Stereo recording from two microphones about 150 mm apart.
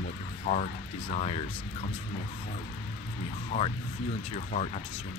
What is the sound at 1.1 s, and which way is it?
Speech, 45° left (ahead or behind).